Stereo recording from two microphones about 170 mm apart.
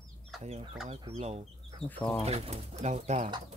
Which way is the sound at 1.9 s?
10° left (ahead or behind).